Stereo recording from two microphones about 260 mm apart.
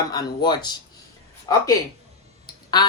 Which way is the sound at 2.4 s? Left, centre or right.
Centre.